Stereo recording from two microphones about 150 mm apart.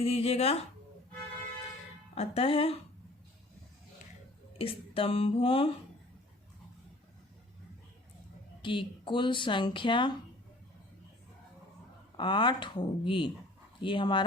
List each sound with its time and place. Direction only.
0.0 s speech: 40° left (ahead or behind)
2.1 s speech: 40° left (ahead or behind)
4.5 s speech: 40° left (ahead or behind)
8.6 s speech: 35° left (ahead or behind)
12.1 s speech: 30° left (ahead or behind)